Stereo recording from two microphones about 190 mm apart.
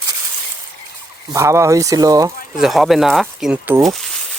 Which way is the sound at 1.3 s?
15° right (ahead or behind).